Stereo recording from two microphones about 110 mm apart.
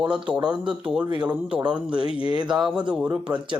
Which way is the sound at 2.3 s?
40° right (ahead or behind).